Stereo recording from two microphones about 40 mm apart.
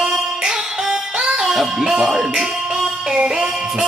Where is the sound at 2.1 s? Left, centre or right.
Centre.